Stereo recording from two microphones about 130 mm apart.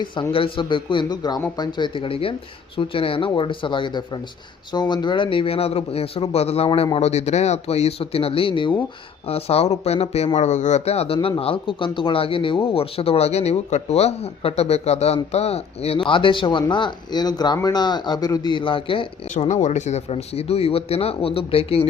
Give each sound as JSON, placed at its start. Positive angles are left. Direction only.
{"t": 0.0, "sound": "speech", "side_deg": 40}
{"t": 9.2, "sound": "speech", "side_deg": 50}
{"t": 16.0, "sound": "speech", "side_deg": 40}
{"t": 19.6, "sound": "speech", "side_deg": 65}